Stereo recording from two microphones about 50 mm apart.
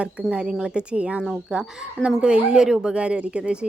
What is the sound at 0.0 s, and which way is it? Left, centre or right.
Speech, right.